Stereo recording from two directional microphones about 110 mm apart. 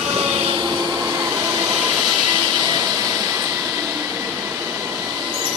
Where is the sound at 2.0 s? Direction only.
40° right (ahead or behind).